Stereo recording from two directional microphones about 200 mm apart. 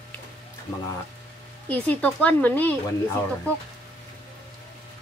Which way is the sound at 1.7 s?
10° left (ahead or behind).